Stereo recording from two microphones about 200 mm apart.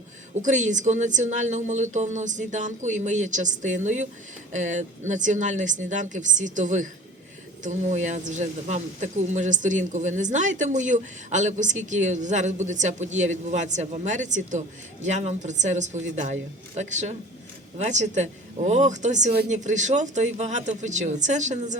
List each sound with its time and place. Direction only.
0.4 s a man's voice: 35° right (ahead or behind)